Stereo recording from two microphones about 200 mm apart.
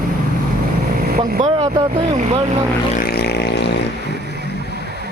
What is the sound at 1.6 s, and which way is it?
Speech, 30° right (ahead or behind).